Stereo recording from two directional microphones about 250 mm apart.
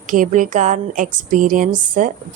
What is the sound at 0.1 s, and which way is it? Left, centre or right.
A woman's voice, right.